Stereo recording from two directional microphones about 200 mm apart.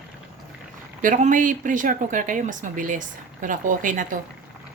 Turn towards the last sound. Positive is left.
turn(degrees=-40)  # may be behind; listen again after turning